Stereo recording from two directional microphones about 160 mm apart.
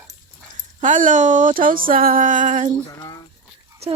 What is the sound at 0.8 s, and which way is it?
Speech, 55° right (ahead or behind).